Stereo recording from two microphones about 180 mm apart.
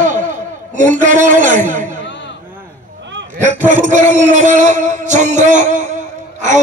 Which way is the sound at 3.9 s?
40° right (ahead or behind).